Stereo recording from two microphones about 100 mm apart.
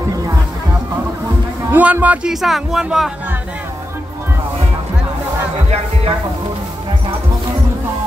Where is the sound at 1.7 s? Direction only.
15° right (ahead or behind).